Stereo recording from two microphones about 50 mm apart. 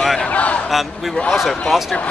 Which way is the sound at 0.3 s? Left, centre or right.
Left.